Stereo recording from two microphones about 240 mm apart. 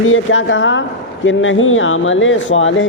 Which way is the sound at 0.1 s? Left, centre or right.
Left.